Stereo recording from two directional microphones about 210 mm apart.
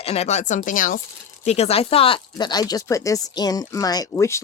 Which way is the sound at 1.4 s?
30° left (ahead or behind).